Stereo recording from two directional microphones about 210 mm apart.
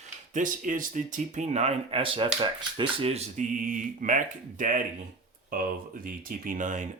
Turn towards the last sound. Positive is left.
turn(degrees=-35)  # may be behind; listen again after turning